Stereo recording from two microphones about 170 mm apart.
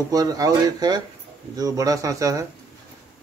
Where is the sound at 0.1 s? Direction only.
20° right (ahead or behind).